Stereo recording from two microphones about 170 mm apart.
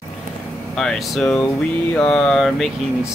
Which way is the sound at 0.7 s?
Centre (ahead or behind).